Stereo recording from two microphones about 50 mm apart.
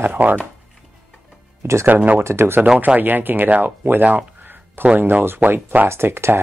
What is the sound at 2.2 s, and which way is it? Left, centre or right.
Speech, right.